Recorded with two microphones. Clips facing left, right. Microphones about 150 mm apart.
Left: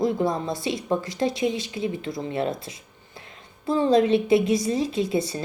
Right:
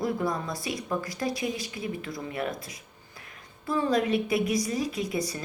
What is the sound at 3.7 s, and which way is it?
Speech, 25° left (ahead or behind).